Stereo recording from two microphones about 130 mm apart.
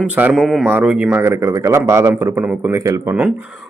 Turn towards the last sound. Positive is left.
turn(degrees=-25)  # may be behind; listen again after turning